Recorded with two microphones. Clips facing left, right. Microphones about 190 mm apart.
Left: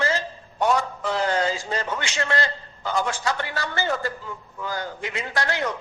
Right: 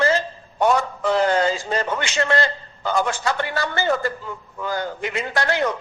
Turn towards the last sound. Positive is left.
turn(degrees=-60)  # may be behind; listen again after turning